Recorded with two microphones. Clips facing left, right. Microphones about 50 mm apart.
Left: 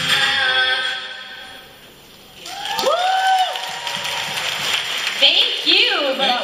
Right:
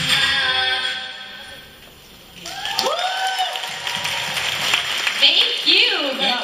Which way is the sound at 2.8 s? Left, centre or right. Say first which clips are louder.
Left 4 dB; right.